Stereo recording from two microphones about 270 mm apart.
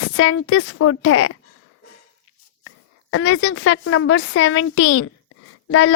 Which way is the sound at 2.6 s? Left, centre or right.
Left.